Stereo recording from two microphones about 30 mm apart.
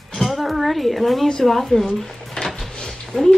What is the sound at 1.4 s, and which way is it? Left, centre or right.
Speech, centre.